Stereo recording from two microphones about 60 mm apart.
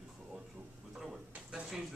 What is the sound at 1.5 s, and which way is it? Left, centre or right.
Speech, centre.